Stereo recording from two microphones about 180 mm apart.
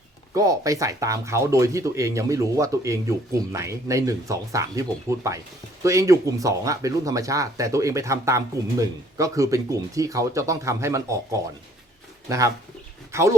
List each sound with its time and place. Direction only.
0.3 s speech: 20° right (ahead or behind)